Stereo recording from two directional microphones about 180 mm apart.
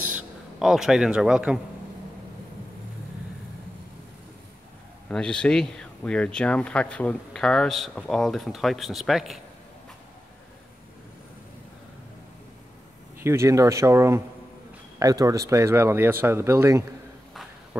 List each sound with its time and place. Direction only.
0.1 s a man's voice: 5° right (ahead or behind)
5.0 s speech: 5° left (ahead or behind)
13.2 s speech: 15° right (ahead or behind)